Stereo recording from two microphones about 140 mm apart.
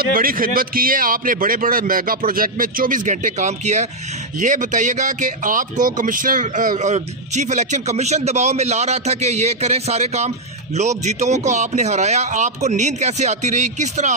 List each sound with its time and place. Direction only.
0.1 s a man's voice: 90° right; by 14.1 s 55° right (ahead or behind)